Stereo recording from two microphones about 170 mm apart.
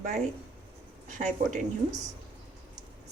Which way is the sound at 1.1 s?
45° right (ahead or behind).